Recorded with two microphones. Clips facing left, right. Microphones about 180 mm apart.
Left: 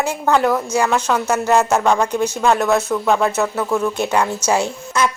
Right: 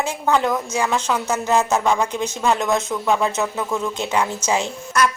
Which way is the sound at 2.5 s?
15° right (ahead or behind).